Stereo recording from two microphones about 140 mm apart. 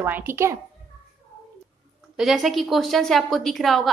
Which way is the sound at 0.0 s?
15° right (ahead or behind).